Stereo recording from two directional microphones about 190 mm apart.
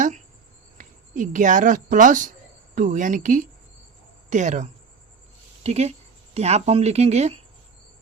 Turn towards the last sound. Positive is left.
turn(degrees=-35)  # may be behind; listen again after turning